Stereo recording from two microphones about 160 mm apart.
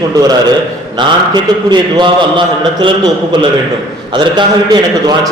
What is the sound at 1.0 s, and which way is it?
A man's voice, 30° right (ahead or behind).